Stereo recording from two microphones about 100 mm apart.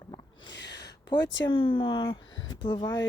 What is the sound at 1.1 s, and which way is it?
Speech, 55° left (ahead or behind).